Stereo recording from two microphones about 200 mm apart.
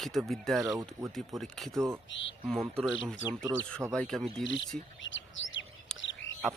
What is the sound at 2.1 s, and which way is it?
Speech, 65° left (ahead or behind).